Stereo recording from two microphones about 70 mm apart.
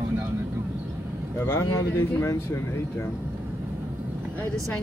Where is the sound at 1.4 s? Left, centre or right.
Left.